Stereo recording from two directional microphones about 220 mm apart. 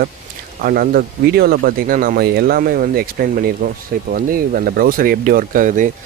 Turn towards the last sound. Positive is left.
turn(degrees=-35)  # may be behind; listen again after turning